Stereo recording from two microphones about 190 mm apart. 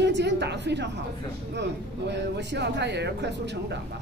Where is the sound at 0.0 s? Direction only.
65° right (ahead or behind).